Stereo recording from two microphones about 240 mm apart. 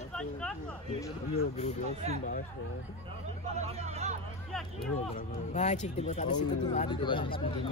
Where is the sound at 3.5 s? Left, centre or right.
Right.